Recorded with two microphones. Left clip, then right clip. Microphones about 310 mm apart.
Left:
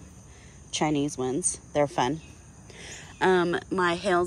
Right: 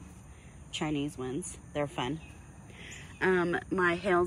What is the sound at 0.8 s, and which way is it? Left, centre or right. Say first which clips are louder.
A woman's voice: left 8 dB; centre.